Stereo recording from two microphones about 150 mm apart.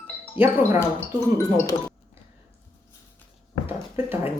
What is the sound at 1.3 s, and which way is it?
Speech, 20° left (ahead or behind).